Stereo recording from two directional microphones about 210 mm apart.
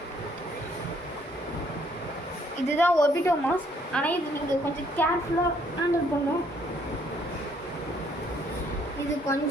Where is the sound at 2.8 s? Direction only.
10° left (ahead or behind).